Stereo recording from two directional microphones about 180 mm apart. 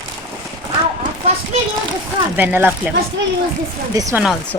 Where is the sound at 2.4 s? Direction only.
10° right (ahead or behind).